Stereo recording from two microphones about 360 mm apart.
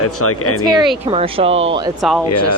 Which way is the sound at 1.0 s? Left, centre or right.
Centre.